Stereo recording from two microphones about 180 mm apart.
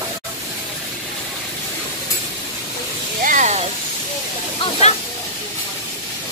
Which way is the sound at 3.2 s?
45° right (ahead or behind).